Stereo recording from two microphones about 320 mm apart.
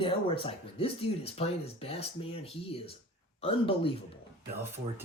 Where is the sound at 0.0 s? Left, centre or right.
Centre.